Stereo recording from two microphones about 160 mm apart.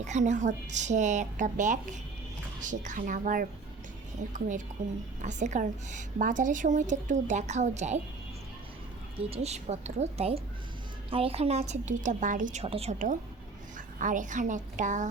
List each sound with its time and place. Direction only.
0.0 s a woman's voice: 50° right (ahead or behind)
9.3 s a woman's voice: 40° right (ahead or behind)
12.6 s speech: 40° right (ahead or behind)
13.7 s a woman's voice: 55° right (ahead or behind)